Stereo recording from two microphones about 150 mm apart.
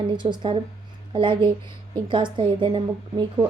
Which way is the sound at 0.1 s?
30° right (ahead or behind).